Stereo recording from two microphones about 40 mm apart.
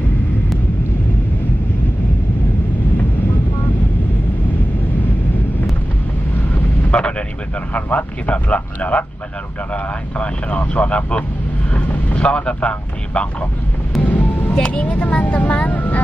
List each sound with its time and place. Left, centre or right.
6.3 s vehicle: left
7.0 s vehicle: left
7.7 s a sound: left
10.1 s speech: left
11.7 s vehicle: left
12.3 s speech: left
14.0 s music: left
14.6 s speech: left